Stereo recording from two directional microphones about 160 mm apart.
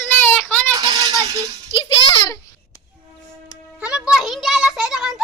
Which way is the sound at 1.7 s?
30° left (ahead or behind).